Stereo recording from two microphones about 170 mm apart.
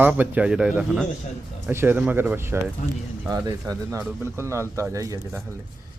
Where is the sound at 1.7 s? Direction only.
15° right (ahead or behind).